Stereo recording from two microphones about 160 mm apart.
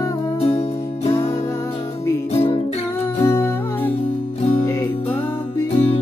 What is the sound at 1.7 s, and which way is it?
Music, 40° left (ahead or behind).